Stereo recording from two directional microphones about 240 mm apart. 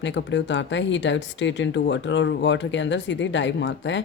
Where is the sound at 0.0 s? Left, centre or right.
Left.